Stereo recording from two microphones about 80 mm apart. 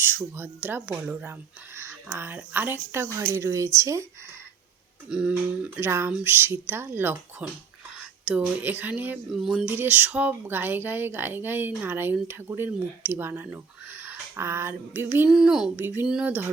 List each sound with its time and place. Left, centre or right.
0.0 s speech: right
5.0 s speech: centre
5.8 s speech: right
9.3 s speech: centre
9.6 s speech: right
15.3 s speech: centre
15.7 s speech: right